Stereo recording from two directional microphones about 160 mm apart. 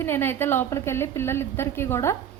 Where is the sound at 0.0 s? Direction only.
15° left (ahead or behind).